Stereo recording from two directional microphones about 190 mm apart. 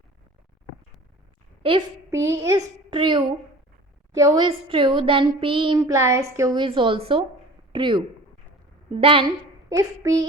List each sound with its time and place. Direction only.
1.6 s a child's voice: 30° right (ahead or behind)
2.0 s a child's voice: 15° right (ahead or behind)
9.6 s speech: 15° right (ahead or behind)